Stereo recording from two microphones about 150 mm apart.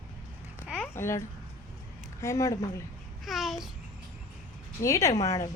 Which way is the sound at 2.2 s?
20° left (ahead or behind).